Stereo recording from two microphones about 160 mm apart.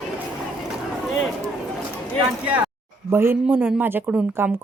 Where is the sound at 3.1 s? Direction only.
15° right (ahead or behind).